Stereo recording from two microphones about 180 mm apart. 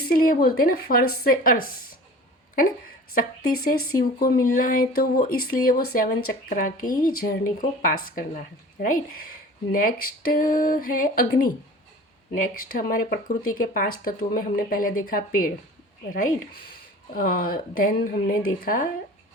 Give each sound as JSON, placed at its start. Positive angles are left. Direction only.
{"t": 0.0, "sound": "speech", "side_deg": 55}
{"t": 3.2, "sound": "speech", "side_deg": 55}
{"t": 12.3, "sound": "speech", "side_deg": 50}